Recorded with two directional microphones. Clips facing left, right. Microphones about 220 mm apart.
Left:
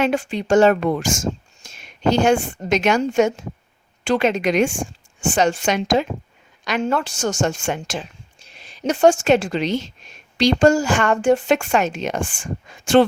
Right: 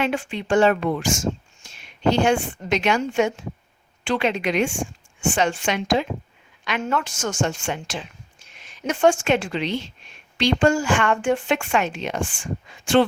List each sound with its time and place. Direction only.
0.0 s a woman's voice: 40° left (ahead or behind)
8.4 s speech: 35° left (ahead or behind)